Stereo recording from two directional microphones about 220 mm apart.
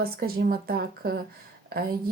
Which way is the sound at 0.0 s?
45° right (ahead or behind).